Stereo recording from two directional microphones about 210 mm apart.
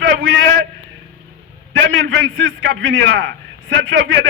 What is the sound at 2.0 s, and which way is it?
A man's voice, 70° right (ahead or behind).